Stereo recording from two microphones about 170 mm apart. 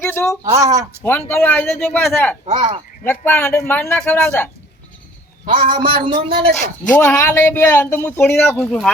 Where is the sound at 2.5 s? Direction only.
40° right (ahead or behind).